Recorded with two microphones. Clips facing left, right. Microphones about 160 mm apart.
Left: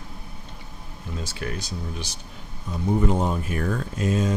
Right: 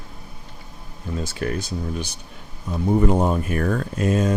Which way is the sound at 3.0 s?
55° right (ahead or behind).